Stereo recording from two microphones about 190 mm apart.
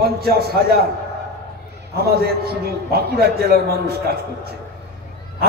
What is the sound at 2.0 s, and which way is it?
A man's voice, 55° right (ahead or behind).